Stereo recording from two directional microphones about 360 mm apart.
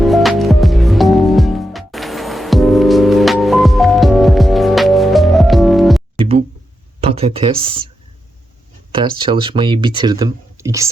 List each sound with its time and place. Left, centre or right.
0.0 s music: centre
6.1 s music: centre
7.0 s speech: centre
8.9 s speech: centre